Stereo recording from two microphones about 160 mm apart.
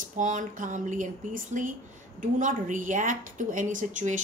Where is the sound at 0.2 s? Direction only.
55° right (ahead or behind).